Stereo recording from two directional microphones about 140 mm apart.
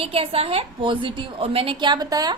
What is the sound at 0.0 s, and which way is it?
A woman's voice, 40° right (ahead or behind).